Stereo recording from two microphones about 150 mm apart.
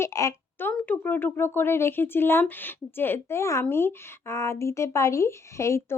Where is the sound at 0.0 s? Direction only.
20° left (ahead or behind).